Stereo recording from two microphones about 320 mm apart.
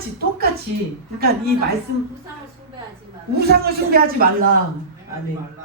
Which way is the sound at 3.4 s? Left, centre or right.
Right.